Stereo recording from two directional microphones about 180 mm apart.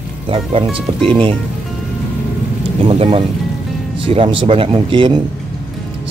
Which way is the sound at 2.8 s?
30° right (ahead or behind).